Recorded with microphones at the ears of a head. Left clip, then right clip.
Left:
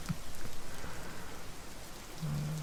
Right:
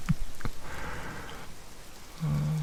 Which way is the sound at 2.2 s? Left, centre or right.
Right.